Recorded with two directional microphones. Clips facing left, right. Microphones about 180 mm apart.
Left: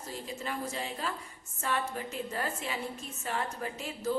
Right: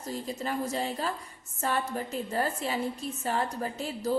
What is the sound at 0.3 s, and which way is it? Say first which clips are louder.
A woman's voice: right 5 dB; 40° right (ahead or behind).